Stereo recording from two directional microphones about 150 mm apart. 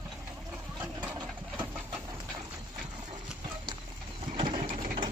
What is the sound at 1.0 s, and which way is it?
Engine, 15° right (ahead or behind).